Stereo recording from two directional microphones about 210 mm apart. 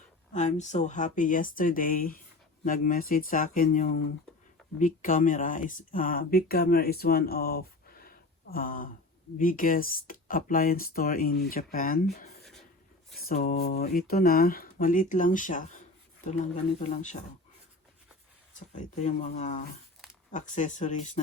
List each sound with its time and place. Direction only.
0.3 s speech: 35° left (ahead or behind)
13.1 s speech: 45° left (ahead or behind)
18.7 s speech: 35° left (ahead or behind)